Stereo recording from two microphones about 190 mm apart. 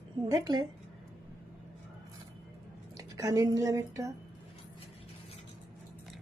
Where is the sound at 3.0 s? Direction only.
20° right (ahead or behind).